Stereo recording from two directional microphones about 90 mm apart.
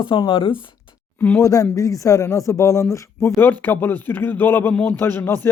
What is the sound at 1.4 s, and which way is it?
Speech, 40° left (ahead or behind).